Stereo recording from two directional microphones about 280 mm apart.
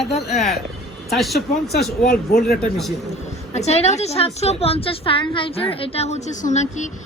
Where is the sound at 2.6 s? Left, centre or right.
Centre.